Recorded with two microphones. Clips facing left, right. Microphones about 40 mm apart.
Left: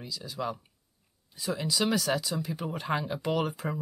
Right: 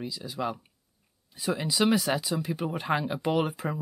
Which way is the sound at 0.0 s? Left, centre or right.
Centre.